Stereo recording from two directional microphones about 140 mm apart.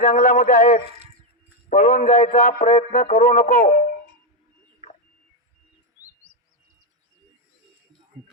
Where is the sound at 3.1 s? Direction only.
45° left (ahead or behind).